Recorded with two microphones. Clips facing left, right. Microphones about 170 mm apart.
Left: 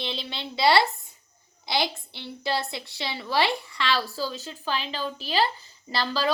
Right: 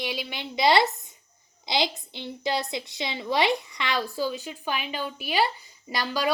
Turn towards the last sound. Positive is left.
turn(degrees=-15)  # may be behind; listen again after turning